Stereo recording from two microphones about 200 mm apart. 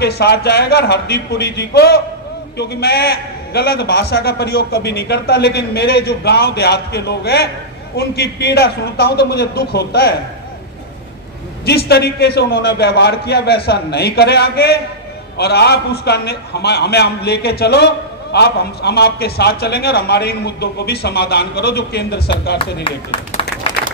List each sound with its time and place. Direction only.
0.0 s a man's voice: 55° left (ahead or behind)
11.6 s a man's voice: 55° left (ahead or behind)
23.6 s clapping: 30° left (ahead or behind)